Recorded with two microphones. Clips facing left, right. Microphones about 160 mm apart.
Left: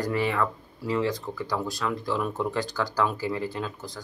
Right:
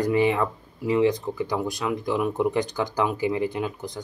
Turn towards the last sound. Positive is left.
turn(degrees=-20)  # may be behind; listen again after turning